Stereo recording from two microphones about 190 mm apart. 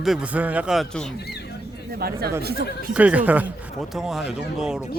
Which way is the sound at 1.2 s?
60° left (ahead or behind).